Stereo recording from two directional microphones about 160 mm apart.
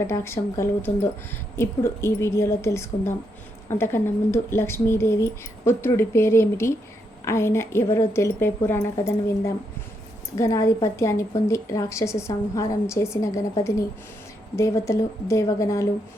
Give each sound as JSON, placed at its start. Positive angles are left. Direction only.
{"t": 0.1, "sound": "a woman's voice", "side_deg": 15}
{"t": 14.5, "sound": "a woman's voice", "side_deg": 20}